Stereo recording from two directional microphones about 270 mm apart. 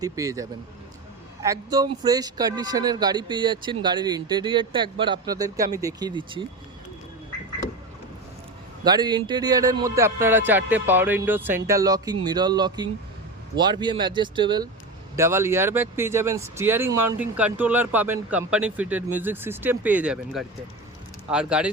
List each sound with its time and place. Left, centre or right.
0.0 s speech: centre
8.8 s speech: centre